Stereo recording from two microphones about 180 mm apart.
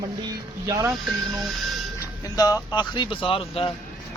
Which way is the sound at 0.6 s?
20° right (ahead or behind).